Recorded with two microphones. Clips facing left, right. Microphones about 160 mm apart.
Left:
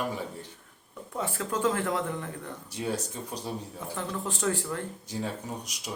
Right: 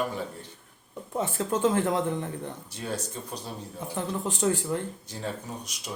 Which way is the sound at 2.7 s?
15° left (ahead or behind).